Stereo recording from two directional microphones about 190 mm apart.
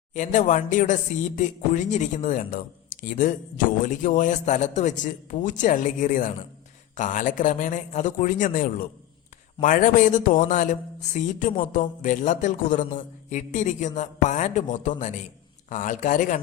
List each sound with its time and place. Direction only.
0.1 s speech: 40° left (ahead or behind)